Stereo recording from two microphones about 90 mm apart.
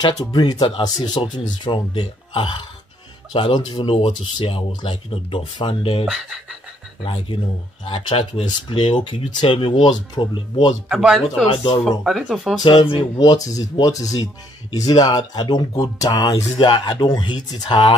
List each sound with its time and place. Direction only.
0.0 s speech: 50° left (ahead or behind); by 0.8 s 70° left (ahead or behind)
0.8 s speech: 50° left (ahead or behind); by 6.0 s 85° left
6.0 s speech: centre (ahead or behind)
7.0 s speech: 75° left (ahead or behind); by 10.7 s 55° left (ahead or behind)
10.9 s speech: 5° right (ahead or behind)
11.4 s speech: 65° left (ahead or behind)
12.0 s speech: centre (ahead or behind)
12.6 s speech: 65° left (ahead or behind)
13.4 s speech: 40° left (ahead or behind); by 17.9 s 60° left (ahead or behind)